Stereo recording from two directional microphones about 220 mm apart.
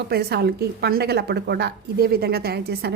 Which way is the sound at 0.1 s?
45° right (ahead or behind).